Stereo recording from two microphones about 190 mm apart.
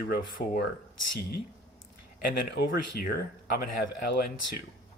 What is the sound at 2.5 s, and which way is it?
Speech, 55° left (ahead or behind).